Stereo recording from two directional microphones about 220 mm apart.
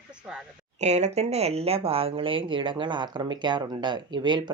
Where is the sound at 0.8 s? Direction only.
30° right (ahead or behind).